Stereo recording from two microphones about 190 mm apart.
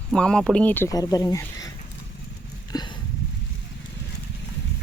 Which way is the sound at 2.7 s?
20° left (ahead or behind).